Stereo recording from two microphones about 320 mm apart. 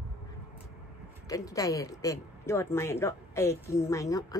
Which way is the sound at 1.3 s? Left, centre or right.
Centre.